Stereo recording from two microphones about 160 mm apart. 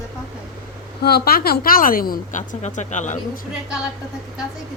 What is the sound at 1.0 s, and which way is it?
A woman's voice, 75° left (ahead or behind).